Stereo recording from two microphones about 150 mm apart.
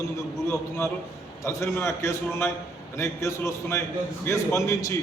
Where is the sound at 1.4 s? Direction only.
20° left (ahead or behind).